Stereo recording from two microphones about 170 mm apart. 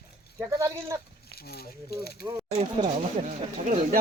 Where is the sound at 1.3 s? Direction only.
65° left (ahead or behind).